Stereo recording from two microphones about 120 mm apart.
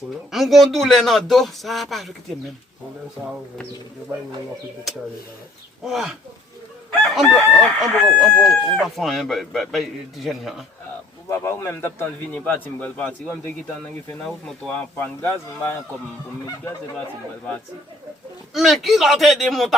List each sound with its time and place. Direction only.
0.3 s speech: centre (ahead or behind)
5.8 s speech: 5° right (ahead or behind)
11.3 s a man's voice: 20° left (ahead or behind)
18.5 s speech: centre (ahead or behind)